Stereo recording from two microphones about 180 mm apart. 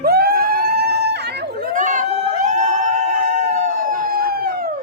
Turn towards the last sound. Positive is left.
turn(degrees=-55)  # may be behind; listen again after turning